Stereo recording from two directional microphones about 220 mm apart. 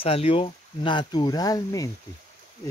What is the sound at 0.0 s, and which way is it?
Speech, 25° left (ahead or behind).